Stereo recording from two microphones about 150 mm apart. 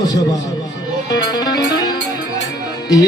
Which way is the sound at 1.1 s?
25° left (ahead or behind).